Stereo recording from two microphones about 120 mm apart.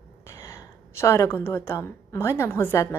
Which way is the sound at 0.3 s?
25° left (ahead or behind).